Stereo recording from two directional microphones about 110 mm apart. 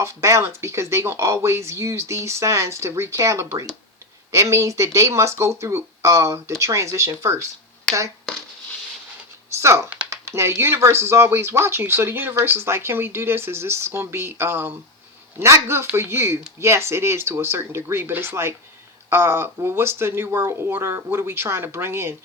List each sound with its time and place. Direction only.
0.0 s speech: 25° right (ahead or behind)
7.9 s speech: 5° left (ahead or behind)
9.6 s speech: 25° right (ahead or behind)